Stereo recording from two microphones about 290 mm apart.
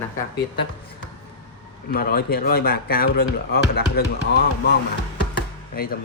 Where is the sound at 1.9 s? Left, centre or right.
Left.